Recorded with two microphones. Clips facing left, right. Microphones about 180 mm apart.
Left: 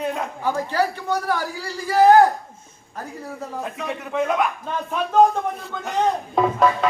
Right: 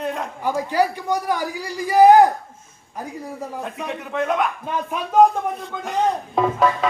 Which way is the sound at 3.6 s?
Centre (ahead or behind).